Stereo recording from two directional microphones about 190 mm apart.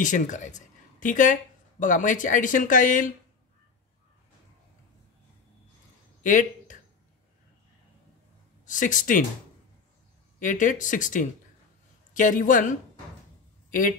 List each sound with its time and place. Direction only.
0.0 s speech: 40° left (ahead or behind)
6.2 s speech: 45° left (ahead or behind)
8.6 s speech: 45° left (ahead or behind)
10.4 s speech: 45° left (ahead or behind)